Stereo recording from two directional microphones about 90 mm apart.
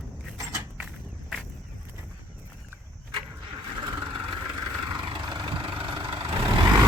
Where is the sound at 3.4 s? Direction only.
65° right (ahead or behind).